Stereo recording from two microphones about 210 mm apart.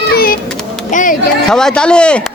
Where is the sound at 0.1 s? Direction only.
45° left (ahead or behind).